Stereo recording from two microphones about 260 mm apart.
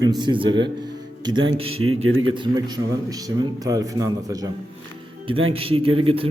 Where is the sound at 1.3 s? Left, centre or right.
Right.